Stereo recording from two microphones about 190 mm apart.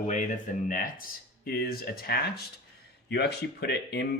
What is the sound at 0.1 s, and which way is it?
Speech, 40° left (ahead or behind).